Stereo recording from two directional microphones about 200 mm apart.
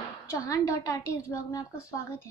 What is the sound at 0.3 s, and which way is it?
Speech, 15° left (ahead or behind).